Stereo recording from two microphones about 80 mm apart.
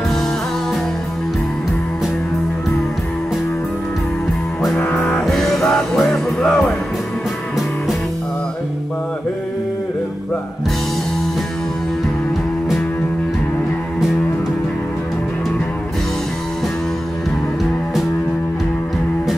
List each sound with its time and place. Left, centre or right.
4.8 s music: centre
5.2 s music: centre